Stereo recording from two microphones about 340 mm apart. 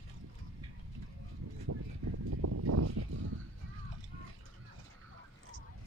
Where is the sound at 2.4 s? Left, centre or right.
Right.